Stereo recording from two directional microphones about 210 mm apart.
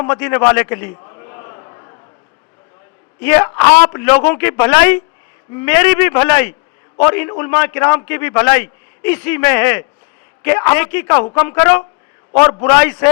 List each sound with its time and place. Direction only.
0.0 s a man's voice: 10° left (ahead or behind)
1.0 s basketball bounce: 20° left (ahead or behind)
3.2 s a man's voice: 10° left (ahead or behind)